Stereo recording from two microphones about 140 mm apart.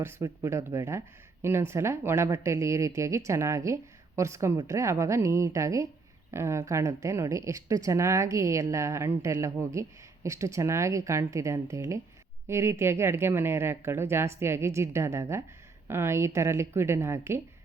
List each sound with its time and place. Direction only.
0.0 s speech: 20° right (ahead or behind)